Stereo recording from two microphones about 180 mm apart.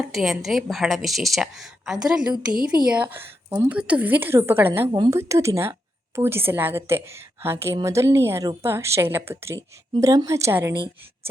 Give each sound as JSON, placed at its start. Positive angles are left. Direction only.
{"t": 0.0, "sound": "a woman's voice", "side_deg": 0}